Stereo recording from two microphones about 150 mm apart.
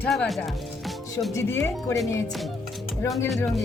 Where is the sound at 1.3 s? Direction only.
20° left (ahead or behind).